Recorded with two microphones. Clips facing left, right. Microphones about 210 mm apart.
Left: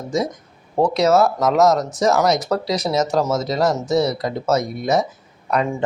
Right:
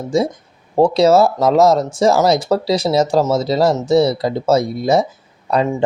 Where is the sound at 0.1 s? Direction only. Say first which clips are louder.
Right 5 dB; 30° right (ahead or behind).